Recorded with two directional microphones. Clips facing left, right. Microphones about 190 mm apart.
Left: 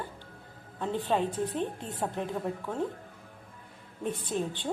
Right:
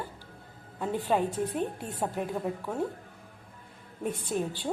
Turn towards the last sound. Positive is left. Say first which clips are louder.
# right 1 dB
turn(degrees=-10)  # may be behind; listen again after turning